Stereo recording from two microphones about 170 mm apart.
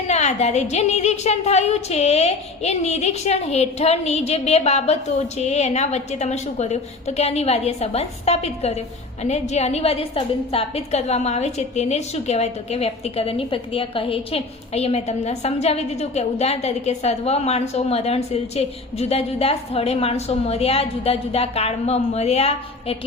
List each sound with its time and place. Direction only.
0.1 s a woman's voice: 40° left (ahead or behind)